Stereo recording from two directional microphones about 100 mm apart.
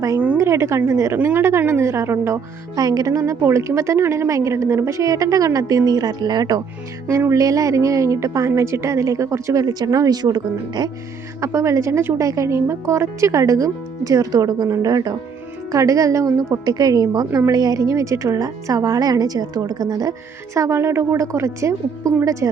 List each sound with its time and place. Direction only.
0.3 s a woman's voice: 25° right (ahead or behind)
2.7 s a woman's voice: 40° right (ahead or behind)
11.3 s a woman's voice: 30° right (ahead or behind)